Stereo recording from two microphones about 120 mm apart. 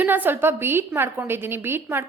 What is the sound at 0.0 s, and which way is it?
A woman's voice, 15° right (ahead or behind).